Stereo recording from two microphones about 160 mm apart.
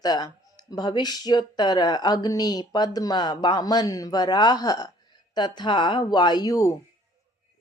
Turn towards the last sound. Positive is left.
turn(degrees=20)  # may be behind; listen again after turning